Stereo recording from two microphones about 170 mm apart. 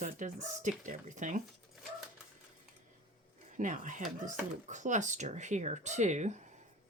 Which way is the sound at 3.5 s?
50° right (ahead or behind).